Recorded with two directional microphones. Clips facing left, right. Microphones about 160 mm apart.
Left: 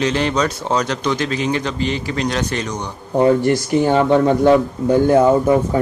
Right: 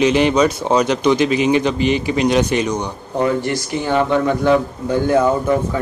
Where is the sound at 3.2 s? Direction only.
40° left (ahead or behind).